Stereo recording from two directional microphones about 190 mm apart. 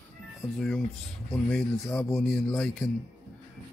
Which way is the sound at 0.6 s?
5° left (ahead or behind).